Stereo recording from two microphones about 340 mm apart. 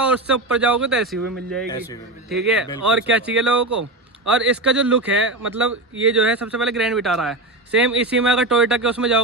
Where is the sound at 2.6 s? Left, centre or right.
Right.